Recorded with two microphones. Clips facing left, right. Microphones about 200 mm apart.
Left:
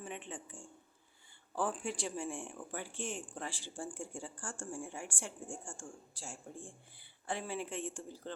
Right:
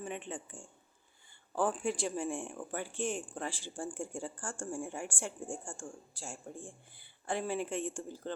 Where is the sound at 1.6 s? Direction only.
50° right (ahead or behind).